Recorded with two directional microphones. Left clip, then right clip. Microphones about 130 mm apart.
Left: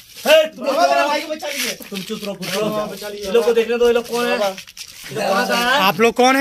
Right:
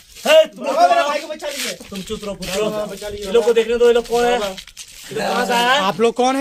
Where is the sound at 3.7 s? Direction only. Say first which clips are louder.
Right 2 dB; 60° right (ahead or behind).